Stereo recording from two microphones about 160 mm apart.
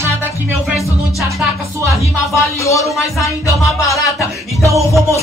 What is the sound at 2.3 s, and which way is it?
Music, 20° left (ahead or behind).